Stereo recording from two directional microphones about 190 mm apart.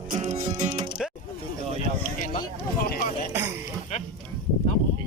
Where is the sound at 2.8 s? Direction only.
50° left (ahead or behind).